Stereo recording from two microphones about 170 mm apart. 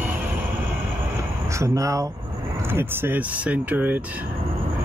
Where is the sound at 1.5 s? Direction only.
20° right (ahead or behind).